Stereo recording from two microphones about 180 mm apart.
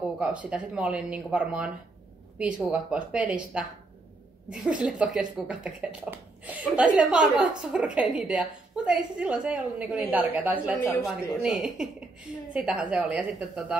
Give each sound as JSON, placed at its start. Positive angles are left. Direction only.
{"t": 0.2, "sound": "speech", "side_deg": -5}
{"t": 4.5, "sound": "a woman's voice", "side_deg": -5}
{"t": 10.8, "sound": "a woman's voice", "side_deg": 15}
{"t": 11.1, "sound": "a woman's voice", "side_deg": -5}